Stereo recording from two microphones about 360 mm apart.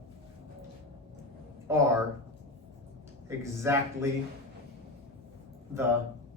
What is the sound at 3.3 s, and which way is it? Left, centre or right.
Speech, centre.